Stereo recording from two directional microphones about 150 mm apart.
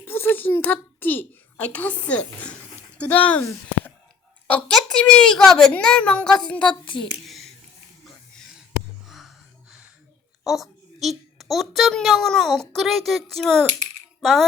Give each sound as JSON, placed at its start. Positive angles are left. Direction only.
{"t": 0.0, "sound": "a child's voice", "side_deg": 15}
{"t": 4.4, "sound": "a woman's voice", "side_deg": 5}
{"t": 6.8, "sound": "a child's voice", "side_deg": 35}
{"t": 7.3, "sound": "a sound", "side_deg": 0}
{"t": 9.0, "sound": "a sound", "side_deg": 0}
{"t": 10.4, "sound": "a child's voice", "side_deg": 0}